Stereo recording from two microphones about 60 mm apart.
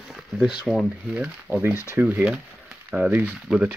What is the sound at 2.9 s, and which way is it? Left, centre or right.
Speech, right.